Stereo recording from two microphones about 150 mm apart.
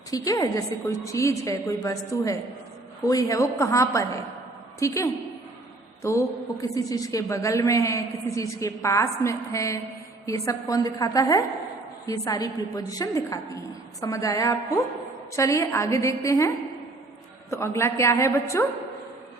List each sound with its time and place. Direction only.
0.1 s a woman's voice: 25° left (ahead or behind)
6.0 s a woman's voice: 20° left (ahead or behind)
17.5 s a woman's voice: 20° left (ahead or behind)